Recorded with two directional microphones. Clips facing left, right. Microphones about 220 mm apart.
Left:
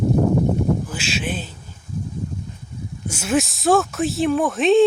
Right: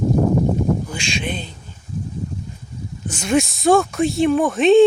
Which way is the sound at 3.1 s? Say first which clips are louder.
Right 2 dB; 5° left (ahead or behind).